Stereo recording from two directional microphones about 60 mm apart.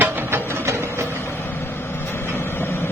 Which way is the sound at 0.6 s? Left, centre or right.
Right.